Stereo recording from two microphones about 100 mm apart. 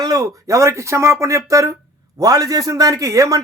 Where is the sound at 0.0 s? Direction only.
35° right (ahead or behind).